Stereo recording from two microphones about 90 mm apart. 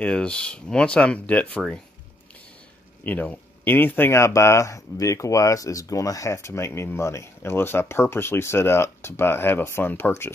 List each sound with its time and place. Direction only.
0.0 s speech: 10° left (ahead or behind)
3.0 s speech: 20° left (ahead or behind)